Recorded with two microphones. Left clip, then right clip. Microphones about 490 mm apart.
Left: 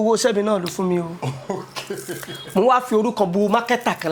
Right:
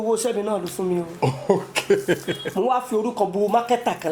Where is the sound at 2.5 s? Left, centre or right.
Left.